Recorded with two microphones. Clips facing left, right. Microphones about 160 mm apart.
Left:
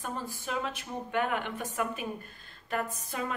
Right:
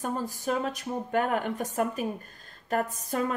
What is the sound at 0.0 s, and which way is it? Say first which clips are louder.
A woman's voice: right 6 dB; 40° right (ahead or behind).